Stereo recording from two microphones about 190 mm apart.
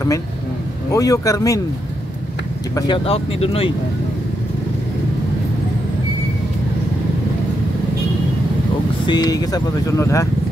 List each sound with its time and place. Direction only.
0.9 s speech: 15° left (ahead or behind)
2.7 s speech: 30° left (ahead or behind)
9.0 s speech: 20° left (ahead or behind)